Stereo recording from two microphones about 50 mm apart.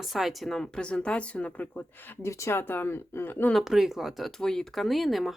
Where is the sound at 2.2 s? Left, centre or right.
Left.